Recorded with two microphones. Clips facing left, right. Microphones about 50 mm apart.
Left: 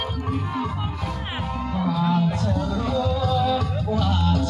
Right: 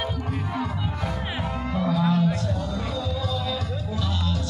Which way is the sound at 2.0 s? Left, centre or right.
Centre.